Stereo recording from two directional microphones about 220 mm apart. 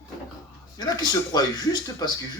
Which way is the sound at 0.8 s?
20° left (ahead or behind).